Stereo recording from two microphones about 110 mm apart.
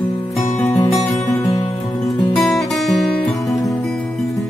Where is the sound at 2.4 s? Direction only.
Centre (ahead or behind).